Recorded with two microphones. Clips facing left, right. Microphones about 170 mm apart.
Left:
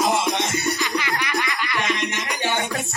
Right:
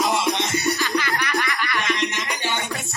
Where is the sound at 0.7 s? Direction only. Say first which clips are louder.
Right 1 dB; 20° left (ahead or behind).